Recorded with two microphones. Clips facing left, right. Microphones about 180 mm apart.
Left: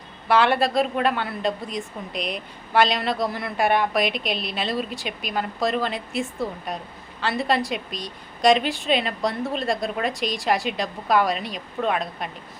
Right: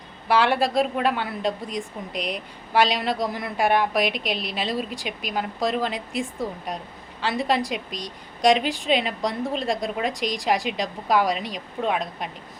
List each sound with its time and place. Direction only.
0.3 s a woman's voice: 10° right (ahead or behind)